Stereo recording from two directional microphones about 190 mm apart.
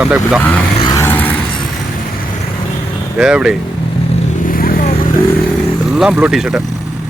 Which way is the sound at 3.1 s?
5° right (ahead or behind).